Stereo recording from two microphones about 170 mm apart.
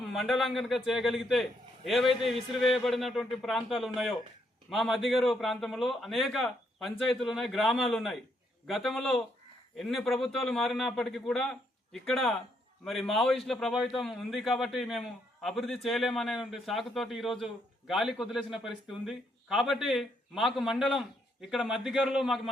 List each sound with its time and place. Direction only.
0.0 s a man's voice: centre (ahead or behind)